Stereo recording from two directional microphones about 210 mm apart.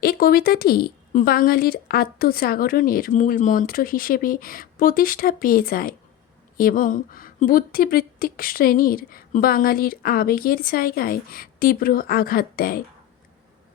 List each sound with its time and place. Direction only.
0.0 s speech: 45° left (ahead or behind)